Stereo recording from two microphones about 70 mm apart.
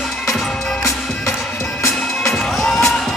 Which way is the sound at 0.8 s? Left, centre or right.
Left.